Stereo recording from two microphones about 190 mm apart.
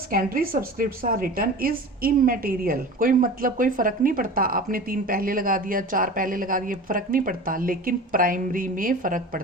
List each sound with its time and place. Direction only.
0.1 s a woman's voice: 50° right (ahead or behind)